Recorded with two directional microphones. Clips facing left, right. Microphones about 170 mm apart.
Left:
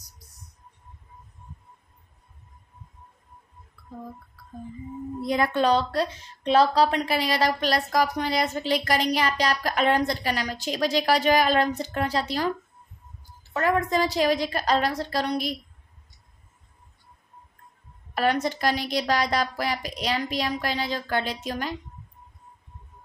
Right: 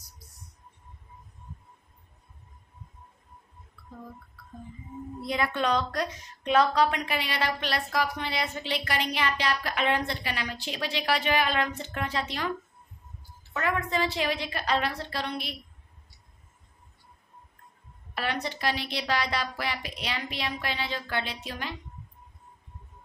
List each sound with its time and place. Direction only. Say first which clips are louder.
5.2 s a woman's voice: left 5 dB; 40° left (ahead or behind)
13.5 s a woman's voice: left 6 dB; 40° left (ahead or behind)
18.1 s a woman's voice: left 8 dB; 45° left (ahead or behind)